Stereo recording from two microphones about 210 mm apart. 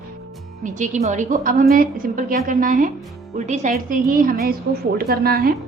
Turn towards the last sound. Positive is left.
turn(degrees=-45)  # may be behind; listen again after turning